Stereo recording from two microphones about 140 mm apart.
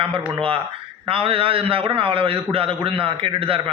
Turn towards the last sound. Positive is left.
turn(degrees=-40)  # may be behind; listen again after turning